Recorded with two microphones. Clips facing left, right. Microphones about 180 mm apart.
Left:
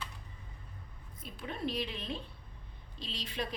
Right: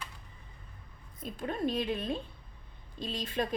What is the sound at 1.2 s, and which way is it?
A woman's voice, 45° right (ahead or behind).